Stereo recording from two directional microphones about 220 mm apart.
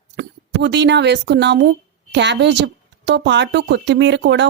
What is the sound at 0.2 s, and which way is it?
A woman's voice, 50° right (ahead or behind).